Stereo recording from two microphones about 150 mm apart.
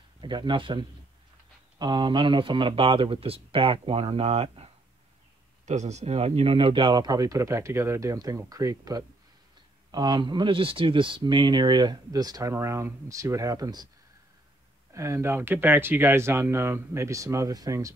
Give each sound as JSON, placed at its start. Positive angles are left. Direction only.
{"t": 0.2, "sound": "speech", "side_deg": -30}
{"t": 5.7, "sound": "speech", "side_deg": -50}
{"t": 14.9, "sound": "speech", "side_deg": -20}